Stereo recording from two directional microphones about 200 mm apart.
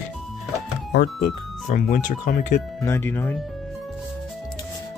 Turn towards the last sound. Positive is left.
turn(degrees=10)  # may be behind; listen again after turning